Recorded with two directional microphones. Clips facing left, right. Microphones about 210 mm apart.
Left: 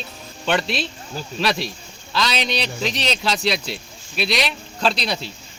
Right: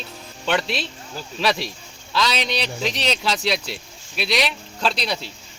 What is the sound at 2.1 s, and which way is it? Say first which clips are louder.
Speech: even; 5° right (ahead or behind).